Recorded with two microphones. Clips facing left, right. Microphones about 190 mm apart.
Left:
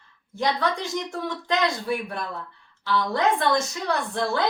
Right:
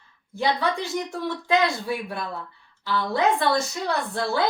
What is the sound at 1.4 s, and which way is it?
A woman's voice, 5° right (ahead or behind).